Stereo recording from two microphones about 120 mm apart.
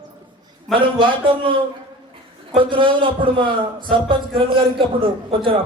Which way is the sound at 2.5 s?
45° right (ahead or behind).